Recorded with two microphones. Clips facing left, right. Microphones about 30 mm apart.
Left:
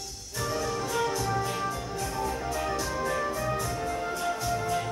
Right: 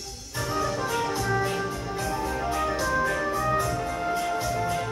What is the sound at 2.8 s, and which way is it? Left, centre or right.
Organ, right.